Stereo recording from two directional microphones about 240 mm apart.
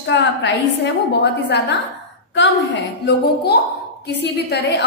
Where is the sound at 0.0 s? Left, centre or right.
Left.